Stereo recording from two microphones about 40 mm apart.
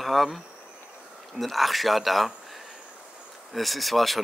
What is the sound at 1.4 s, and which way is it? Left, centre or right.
Speech, centre.